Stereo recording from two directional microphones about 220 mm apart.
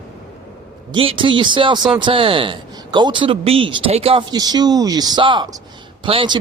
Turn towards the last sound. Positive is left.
turn(degrees=-25)  # may be behind; listen again after turning